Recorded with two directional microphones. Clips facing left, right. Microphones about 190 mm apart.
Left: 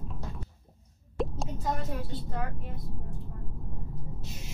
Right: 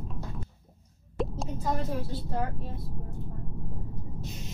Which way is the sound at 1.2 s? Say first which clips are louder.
Even; centre (ahead or behind).